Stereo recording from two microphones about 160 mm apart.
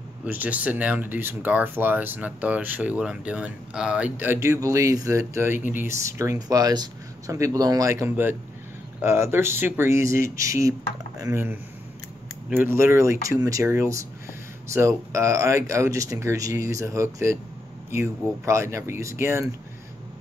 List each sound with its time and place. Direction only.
0.2 s speech: 10° right (ahead or behind)